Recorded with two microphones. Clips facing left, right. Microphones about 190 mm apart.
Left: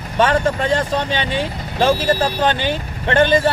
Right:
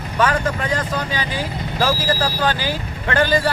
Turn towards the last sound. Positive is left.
turn(degrees=25)  # may be behind; listen again after turning